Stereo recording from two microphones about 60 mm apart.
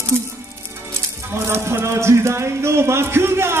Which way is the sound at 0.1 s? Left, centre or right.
Right.